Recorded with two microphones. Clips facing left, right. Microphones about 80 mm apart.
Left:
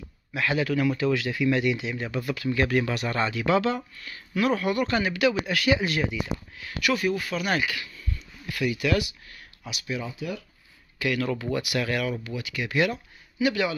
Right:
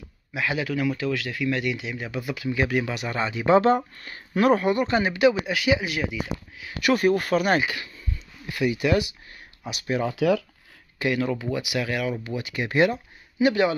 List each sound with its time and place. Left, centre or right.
0.3 s speech: centre
3.3 s speech: right; by 6.1 s centre
6.8 s speech: right
9.7 s speech: right
10.0 s speech: right
11.0 s speech: right
12.2 s speech: right